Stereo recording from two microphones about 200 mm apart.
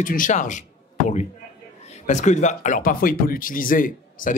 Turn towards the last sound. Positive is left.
turn(degrees=45)  # may be behind; listen again after turning